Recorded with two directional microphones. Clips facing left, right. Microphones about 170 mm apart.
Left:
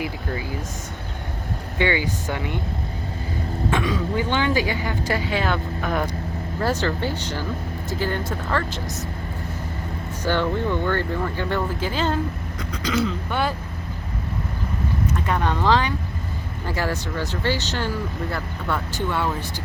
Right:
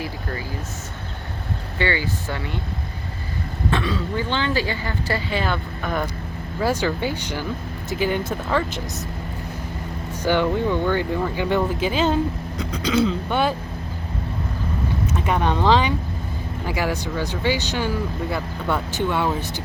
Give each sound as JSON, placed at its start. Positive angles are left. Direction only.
{"t": 1.8, "sound": "speech", "side_deg": 15}
{"t": 3.7, "sound": "speech", "side_deg": 15}
{"t": 5.4, "sound": "speech", "side_deg": 0}
{"t": 6.6, "sound": "speech", "side_deg": -10}
{"t": 10.2, "sound": "speech", "side_deg": -15}
{"t": 15.0, "sound": "speech", "side_deg": -20}